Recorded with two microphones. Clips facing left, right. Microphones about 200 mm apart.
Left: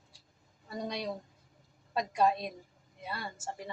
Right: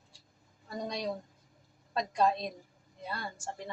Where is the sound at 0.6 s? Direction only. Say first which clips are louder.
Right 1 dB; 5° left (ahead or behind).